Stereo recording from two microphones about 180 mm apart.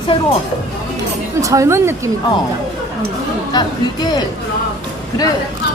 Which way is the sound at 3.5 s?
20° left (ahead or behind).